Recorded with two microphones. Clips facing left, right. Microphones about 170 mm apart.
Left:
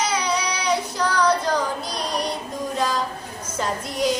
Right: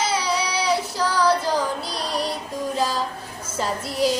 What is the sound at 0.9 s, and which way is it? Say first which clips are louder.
Child singing: even; 5° right (ahead or behind).